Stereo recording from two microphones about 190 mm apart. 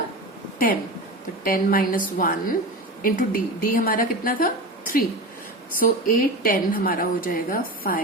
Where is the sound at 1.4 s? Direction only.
50° left (ahead or behind).